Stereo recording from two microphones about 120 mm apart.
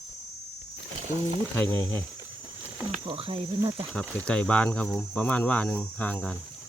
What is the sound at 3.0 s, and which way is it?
Speech, 50° right (ahead or behind).